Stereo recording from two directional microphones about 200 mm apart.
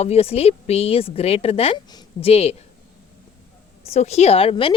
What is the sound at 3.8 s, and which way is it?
Speech, 30° left (ahead or behind).